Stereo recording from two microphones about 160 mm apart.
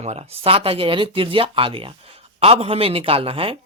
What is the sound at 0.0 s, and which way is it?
Speech, 40° right (ahead or behind).